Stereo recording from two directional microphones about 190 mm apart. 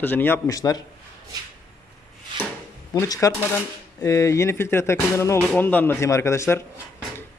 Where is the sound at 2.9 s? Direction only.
15° left (ahead or behind).